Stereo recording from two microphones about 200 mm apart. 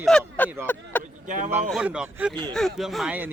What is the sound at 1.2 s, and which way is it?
Speech, 40° right (ahead or behind).